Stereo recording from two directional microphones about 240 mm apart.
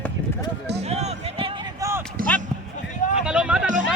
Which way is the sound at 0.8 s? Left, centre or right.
Right.